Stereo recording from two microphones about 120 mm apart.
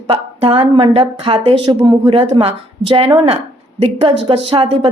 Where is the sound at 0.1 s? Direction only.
55° right (ahead or behind).